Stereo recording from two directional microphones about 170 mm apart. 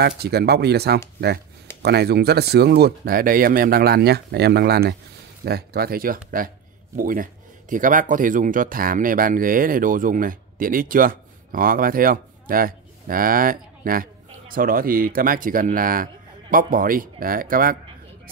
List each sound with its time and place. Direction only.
0.2 s speech: 70° right (ahead or behind)